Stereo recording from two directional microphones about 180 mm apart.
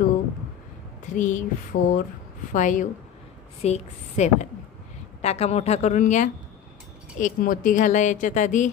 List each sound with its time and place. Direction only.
1.1 s a woman's voice: 45° left (ahead or behind)